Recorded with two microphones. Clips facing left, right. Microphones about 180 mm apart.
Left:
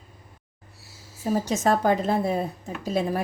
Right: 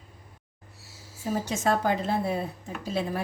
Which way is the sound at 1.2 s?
40° left (ahead or behind).